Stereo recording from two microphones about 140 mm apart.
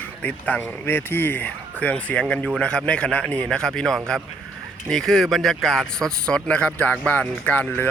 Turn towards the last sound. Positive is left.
turn(degrees=10)  # may be behind; listen again after turning